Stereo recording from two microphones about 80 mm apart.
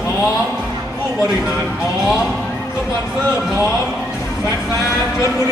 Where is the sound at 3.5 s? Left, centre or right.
Left.